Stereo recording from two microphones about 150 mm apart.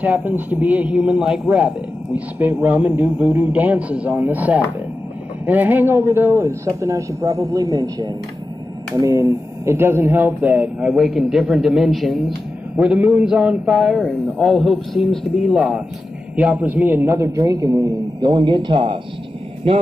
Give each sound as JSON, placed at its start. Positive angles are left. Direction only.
{"t": 0.0, "sound": "a man's voice", "side_deg": -10}